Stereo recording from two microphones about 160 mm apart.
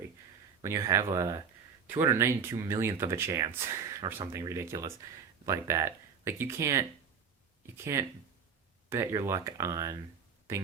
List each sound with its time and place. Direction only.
0.6 s speech: 20° right (ahead or behind)
7.9 s speech: 20° right (ahead or behind)